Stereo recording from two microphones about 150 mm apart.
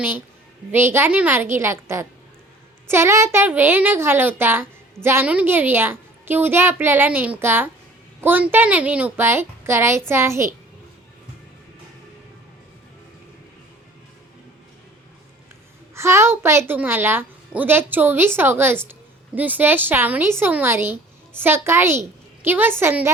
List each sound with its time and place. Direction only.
0.7 s a woman's voice: 15° right (ahead or behind)
16.0 s a woman's voice: 20° right (ahead or behind)